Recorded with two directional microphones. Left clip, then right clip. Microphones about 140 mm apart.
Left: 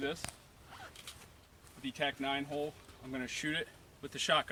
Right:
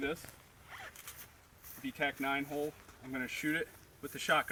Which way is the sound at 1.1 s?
60° left (ahead or behind).